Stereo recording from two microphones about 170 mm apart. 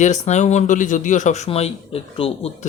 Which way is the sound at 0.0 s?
45° left (ahead or behind).